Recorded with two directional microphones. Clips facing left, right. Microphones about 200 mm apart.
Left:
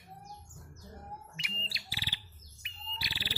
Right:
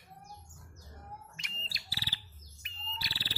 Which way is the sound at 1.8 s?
15° left (ahead or behind).